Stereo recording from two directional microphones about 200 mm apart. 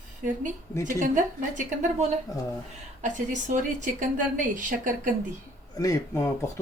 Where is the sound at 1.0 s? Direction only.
40° right (ahead or behind).